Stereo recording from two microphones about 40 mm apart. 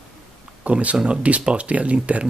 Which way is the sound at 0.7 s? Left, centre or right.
Right.